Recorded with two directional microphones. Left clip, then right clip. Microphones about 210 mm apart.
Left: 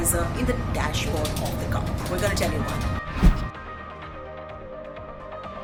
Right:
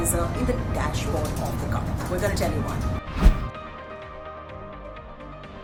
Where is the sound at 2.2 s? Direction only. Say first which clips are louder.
Left 1 dB; 5° right (ahead or behind).